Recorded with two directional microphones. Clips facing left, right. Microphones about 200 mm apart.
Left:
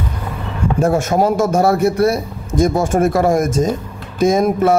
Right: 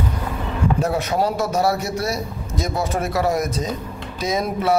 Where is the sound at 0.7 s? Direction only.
50° left (ahead or behind).